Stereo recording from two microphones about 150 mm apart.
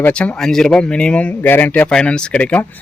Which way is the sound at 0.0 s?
10° left (ahead or behind).